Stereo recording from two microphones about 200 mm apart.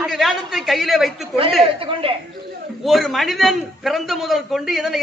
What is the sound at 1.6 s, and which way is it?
Speech, 25° right (ahead or behind).